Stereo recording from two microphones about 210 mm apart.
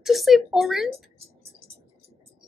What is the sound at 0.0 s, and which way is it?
Speech, centre (ahead or behind).